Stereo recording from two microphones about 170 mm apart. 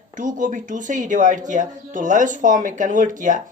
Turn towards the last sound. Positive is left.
turn(degrees=-50)  # may be behind; listen again after turning